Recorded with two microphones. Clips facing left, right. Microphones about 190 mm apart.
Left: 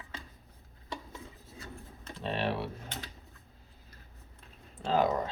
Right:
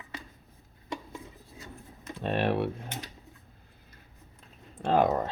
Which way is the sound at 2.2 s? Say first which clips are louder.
Right 5 dB; 55° right (ahead or behind).